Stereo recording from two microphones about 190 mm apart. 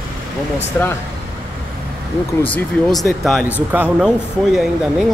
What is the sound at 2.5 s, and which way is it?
Speech, centre (ahead or behind).